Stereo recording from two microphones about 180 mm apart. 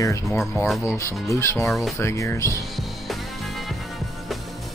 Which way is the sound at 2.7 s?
Centre (ahead or behind).